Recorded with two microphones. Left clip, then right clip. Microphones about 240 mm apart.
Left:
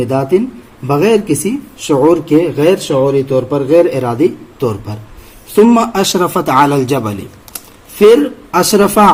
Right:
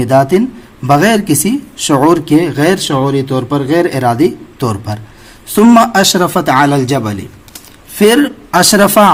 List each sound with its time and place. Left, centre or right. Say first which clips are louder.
0.0 s a man's voice: right 4 dB; right